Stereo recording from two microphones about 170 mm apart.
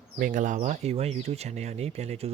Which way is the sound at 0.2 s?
50° right (ahead or behind).